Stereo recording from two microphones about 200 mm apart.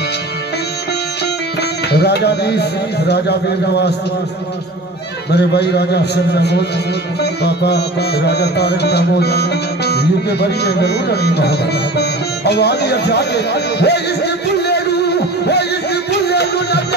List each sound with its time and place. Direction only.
1.9 s music: 55° left (ahead or behind)
5.3 s music: 55° left (ahead or behind)